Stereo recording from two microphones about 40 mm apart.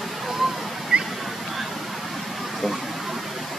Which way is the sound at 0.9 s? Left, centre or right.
Right.